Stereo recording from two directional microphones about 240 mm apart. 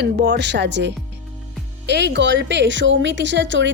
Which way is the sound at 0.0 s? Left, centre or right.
Right.